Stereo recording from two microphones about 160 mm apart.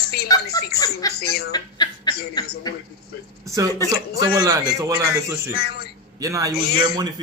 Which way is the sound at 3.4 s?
20° right (ahead or behind).